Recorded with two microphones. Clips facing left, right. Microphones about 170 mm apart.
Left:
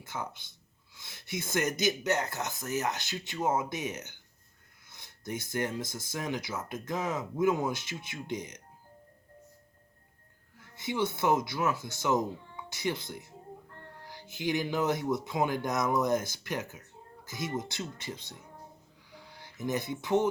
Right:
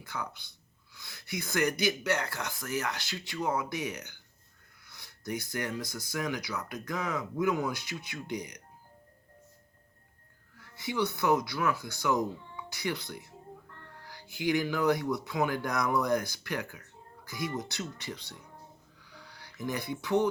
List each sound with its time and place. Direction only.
0.0 s speech: 20° left (ahead or behind)
10.6 s speech: 20° left (ahead or behind)